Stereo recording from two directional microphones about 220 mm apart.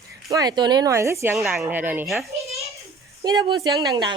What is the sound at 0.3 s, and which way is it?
Speech, 15° right (ahead or behind).